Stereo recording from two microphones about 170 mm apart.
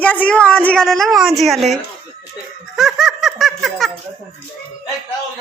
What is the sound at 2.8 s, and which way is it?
Baby laughter, centre (ahead or behind).